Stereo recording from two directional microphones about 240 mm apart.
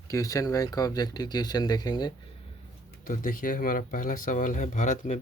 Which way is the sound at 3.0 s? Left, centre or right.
Left.